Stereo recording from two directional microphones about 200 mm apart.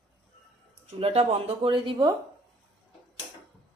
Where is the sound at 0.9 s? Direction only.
30° right (ahead or behind).